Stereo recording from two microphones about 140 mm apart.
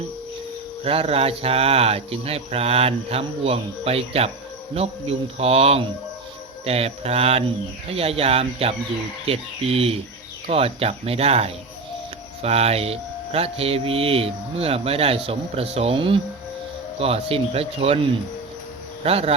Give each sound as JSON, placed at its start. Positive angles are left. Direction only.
{"t": 0.9, "sound": "speech", "side_deg": -45}
{"t": 19.0, "sound": "speech", "side_deg": -45}